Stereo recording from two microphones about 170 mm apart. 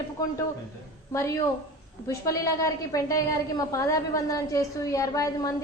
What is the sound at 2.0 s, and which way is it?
A woman's voice, 20° left (ahead or behind).